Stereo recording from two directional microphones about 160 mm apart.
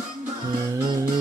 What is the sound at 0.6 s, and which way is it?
Music, 25° right (ahead or behind).